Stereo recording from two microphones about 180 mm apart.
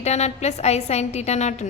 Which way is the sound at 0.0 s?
35° left (ahead or behind).